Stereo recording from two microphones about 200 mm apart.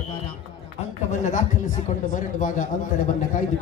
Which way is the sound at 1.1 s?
40° left (ahead or behind).